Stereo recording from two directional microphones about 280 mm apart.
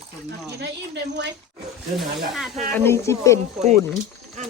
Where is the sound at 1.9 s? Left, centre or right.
Centre.